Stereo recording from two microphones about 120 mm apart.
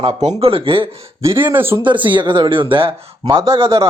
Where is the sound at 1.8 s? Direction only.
40° right (ahead or behind).